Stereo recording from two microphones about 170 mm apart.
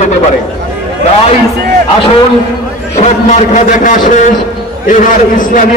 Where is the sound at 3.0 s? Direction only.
40° left (ahead or behind).